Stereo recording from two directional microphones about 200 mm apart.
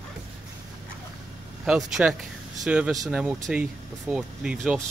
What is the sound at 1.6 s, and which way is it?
Speech, 5° right (ahead or behind).